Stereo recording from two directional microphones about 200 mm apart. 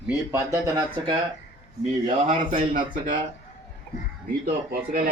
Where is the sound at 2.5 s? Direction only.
45° right (ahead or behind).